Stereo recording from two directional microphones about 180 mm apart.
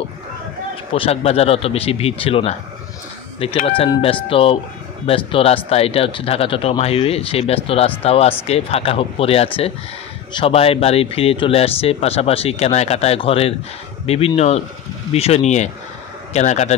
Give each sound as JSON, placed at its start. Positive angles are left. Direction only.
{"t": 0.9, "sound": "speech", "side_deg": 30}
{"t": 3.6, "sound": "speech", "side_deg": 30}